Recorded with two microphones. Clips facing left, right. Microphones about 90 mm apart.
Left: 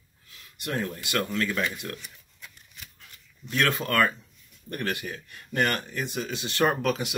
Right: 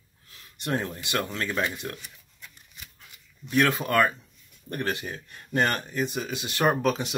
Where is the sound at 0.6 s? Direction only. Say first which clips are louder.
Right 1 dB; 30° right (ahead or behind).